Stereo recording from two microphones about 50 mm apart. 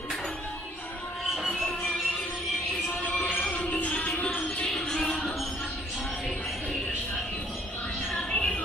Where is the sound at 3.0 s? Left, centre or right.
Left.